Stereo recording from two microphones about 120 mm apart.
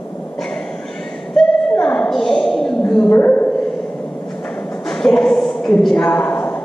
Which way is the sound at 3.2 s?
20° left (ahead or behind).